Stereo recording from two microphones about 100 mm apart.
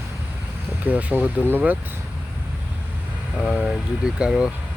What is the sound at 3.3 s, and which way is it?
Speech, centre (ahead or behind).